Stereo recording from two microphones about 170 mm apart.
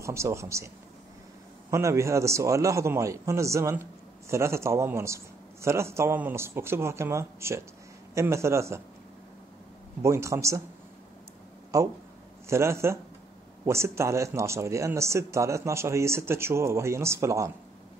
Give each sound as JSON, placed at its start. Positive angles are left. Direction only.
{"t": 0.0, "sound": "speech", "side_deg": -15}
{"t": 1.7, "sound": "speech", "side_deg": -15}
{"t": 10.0, "sound": "speech", "side_deg": -15}
{"t": 11.7, "sound": "speech", "side_deg": -20}